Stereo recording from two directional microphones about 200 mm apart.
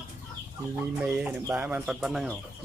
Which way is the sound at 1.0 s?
5° right (ahead or behind).